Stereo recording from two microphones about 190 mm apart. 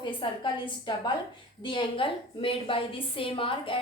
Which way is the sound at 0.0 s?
25° left (ahead or behind).